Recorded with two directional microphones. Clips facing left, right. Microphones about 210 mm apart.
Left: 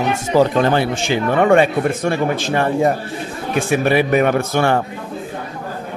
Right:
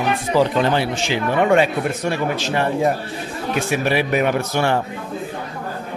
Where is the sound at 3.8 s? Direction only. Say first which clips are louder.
Left 5 dB; 50° left (ahead or behind).